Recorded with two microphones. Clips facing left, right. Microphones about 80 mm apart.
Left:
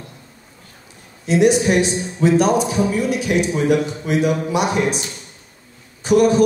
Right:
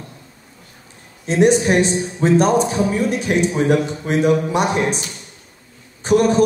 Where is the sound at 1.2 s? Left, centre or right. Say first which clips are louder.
Even; right.